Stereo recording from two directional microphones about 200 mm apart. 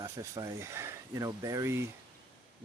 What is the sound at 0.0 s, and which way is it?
Speech, 15° right (ahead or behind).